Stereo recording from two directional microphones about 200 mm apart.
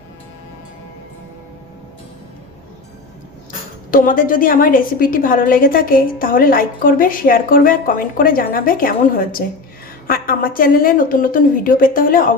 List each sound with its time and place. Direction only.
3.9 s a woman's voice: 45° left (ahead or behind)